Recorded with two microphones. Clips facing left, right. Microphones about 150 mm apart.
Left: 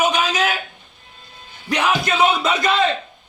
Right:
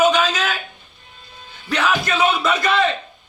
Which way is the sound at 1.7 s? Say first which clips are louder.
Left 1 dB; 15° left (ahead or behind).